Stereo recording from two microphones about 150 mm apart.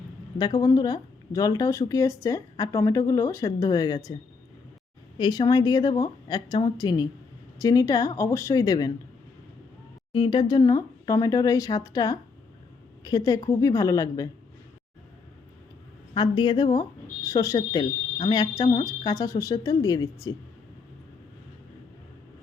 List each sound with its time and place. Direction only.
0.3 s speech: 25° left (ahead or behind)
5.1 s speech: 30° left (ahead or behind)
10.1 s speech: 35° left (ahead or behind)
16.1 s speech: 30° left (ahead or behind)